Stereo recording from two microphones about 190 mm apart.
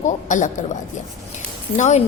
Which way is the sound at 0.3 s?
40° left (ahead or behind).